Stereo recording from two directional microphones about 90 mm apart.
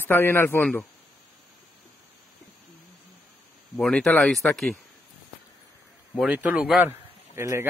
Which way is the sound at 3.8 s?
10° left (ahead or behind).